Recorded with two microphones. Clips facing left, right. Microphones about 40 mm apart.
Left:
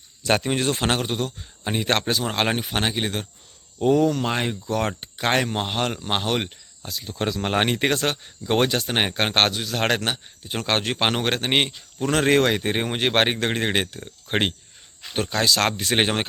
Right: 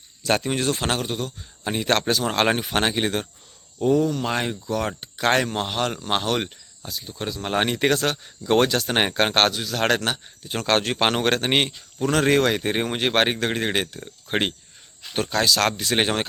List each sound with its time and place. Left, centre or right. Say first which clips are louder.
0.3 s speech: left 1 dB; left
1.4 s speech: even; centre
3.8 s speech: left 1 dB; left
4.3 s speech: even; centre
4.6 s speech: left 1 dB; left
4.9 s speech: right 2 dB; left
6.8 s speech: left 4 dB; left
7.4 s speech: right 1 dB; left
8.2 s speech: right 2 dB; centre
8.9 s speech: right 2 dB; centre
9.3 s speech: right 1 dB; left
15.4 s speech: even; left
16.0 s speech: left 1 dB; left